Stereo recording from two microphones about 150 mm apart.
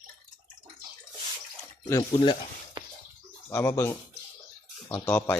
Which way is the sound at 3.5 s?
15° left (ahead or behind).